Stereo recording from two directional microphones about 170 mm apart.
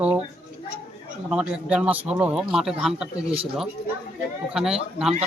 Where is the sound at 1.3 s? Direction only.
5° right (ahead or behind).